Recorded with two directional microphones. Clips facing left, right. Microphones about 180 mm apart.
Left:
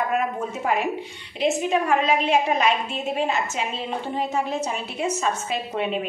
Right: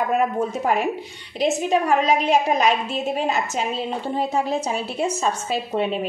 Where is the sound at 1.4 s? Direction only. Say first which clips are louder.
Right 2 dB; 40° right (ahead or behind).